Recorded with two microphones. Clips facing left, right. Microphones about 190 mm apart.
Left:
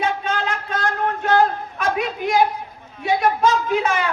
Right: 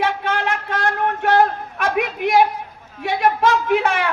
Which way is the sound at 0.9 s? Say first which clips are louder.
Right 2 dB; 60° right (ahead or behind).